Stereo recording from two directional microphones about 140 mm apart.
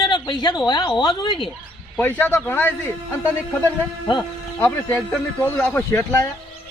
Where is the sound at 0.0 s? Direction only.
30° left (ahead or behind).